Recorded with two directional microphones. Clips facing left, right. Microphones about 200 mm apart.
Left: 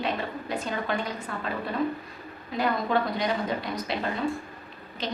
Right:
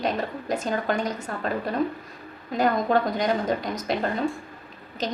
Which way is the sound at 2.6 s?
45° right (ahead or behind).